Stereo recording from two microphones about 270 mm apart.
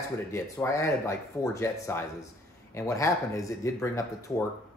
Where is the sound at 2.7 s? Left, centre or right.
Centre.